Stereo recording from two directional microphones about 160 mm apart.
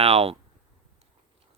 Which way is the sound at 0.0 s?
40° right (ahead or behind).